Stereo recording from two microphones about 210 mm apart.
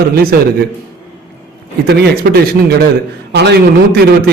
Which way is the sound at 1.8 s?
50° right (ahead or behind).